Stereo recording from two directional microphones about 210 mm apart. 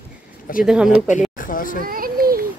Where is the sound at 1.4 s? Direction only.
40° left (ahead or behind).